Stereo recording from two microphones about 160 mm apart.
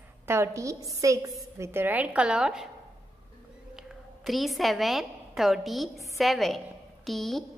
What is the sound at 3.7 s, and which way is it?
A woman's voice, centre (ahead or behind).